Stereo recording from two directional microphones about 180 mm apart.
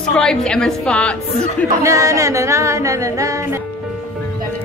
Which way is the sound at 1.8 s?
20° right (ahead or behind).